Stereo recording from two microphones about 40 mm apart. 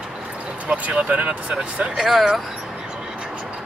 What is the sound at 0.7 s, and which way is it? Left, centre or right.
Speech, right.